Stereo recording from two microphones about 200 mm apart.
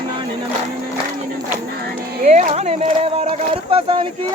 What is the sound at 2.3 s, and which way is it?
Speech, 35° right (ahead or behind).